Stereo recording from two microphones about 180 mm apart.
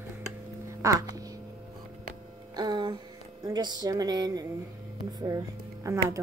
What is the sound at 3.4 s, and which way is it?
Speech, 20° right (ahead or behind).